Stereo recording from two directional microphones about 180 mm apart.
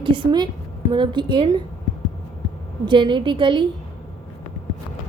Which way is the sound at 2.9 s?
25° right (ahead or behind).